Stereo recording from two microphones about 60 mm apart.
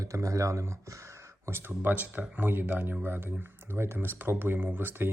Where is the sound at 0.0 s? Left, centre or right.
Right.